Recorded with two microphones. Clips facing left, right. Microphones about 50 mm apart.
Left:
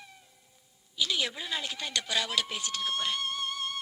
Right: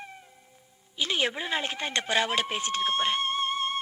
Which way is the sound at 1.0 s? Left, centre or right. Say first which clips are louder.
Right 3 dB; right.